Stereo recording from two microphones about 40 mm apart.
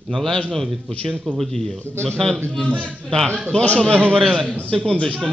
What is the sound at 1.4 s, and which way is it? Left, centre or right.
Speech, centre.